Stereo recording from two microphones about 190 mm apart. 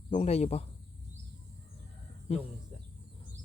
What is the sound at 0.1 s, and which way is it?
Speech, 35° left (ahead or behind).